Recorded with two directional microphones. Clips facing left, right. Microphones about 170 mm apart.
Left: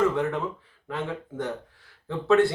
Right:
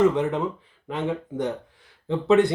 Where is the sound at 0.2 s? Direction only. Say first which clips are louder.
Right 3 dB; 20° right (ahead or behind).